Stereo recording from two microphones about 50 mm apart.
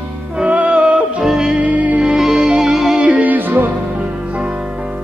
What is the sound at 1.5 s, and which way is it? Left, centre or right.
Music, right.